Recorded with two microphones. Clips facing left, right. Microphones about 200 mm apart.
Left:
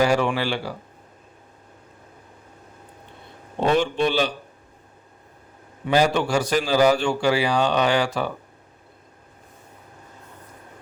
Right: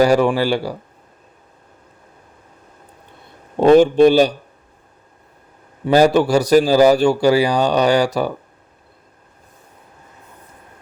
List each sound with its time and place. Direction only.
0.0 s a man's voice: 40° right (ahead or behind)
3.6 s a man's voice: 40° right (ahead or behind)
5.8 s a man's voice: 40° right (ahead or behind)